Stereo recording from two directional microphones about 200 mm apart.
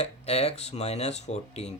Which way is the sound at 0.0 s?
30° left (ahead or behind).